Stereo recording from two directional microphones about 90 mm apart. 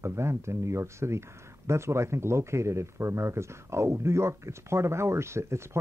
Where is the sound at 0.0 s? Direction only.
30° right (ahead or behind).